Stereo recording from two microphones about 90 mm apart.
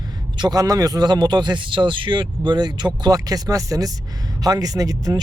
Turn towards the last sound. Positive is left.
turn(degrees=-40)  # may be behind; listen again after turning